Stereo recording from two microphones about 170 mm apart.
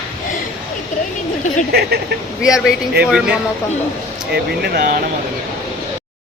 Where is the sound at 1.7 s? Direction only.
70° right (ahead or behind).